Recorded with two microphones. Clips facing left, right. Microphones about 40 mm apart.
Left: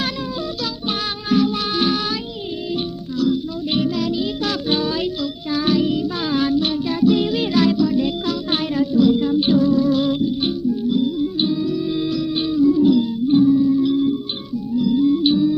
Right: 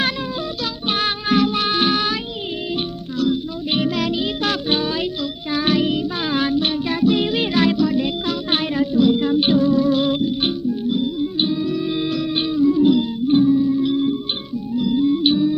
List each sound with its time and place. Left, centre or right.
0.9 s music: right
3.8 s music: right
4.7 s music: right
5.5 s music: right
10.7 s music: right
11.6 s music: right
12.5 s music: right
12.8 s music: right
13.5 s music: centre
13.8 s music: right